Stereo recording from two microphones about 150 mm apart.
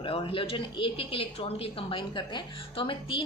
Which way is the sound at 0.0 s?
35° left (ahead or behind).